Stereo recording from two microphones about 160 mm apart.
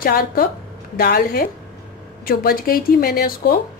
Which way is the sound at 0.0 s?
70° left (ahead or behind).